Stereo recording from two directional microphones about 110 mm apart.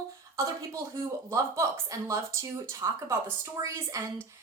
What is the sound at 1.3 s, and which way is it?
A woman's voice, 25° right (ahead or behind).